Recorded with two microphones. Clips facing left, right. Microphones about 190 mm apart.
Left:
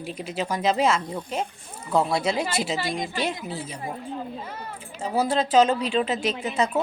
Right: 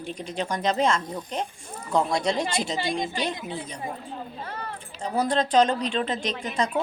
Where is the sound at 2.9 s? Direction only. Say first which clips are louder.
Right 1 dB; 25° right (ahead or behind).